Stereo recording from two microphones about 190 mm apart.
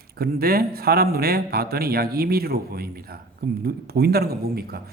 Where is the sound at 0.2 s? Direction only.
55° right (ahead or behind).